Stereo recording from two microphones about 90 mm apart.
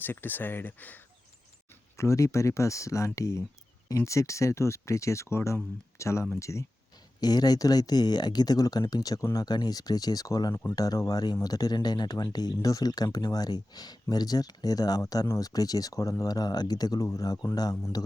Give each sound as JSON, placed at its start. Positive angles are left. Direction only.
{"t": 0.0, "sound": "speech", "side_deg": 20}
{"t": 2.0, "sound": "speech", "side_deg": 35}
{"t": 7.2, "sound": "speech", "side_deg": 45}
{"t": 10.5, "sound": "speech", "side_deg": 25}
{"t": 10.8, "sound": "speech", "side_deg": 40}